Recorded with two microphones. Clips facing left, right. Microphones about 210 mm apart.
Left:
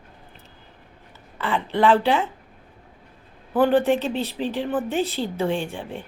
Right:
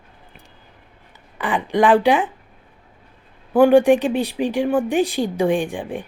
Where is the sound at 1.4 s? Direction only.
15° right (ahead or behind).